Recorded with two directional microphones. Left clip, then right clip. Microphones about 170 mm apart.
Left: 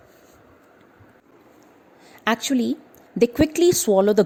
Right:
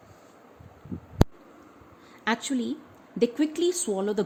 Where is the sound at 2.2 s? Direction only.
50° left (ahead or behind).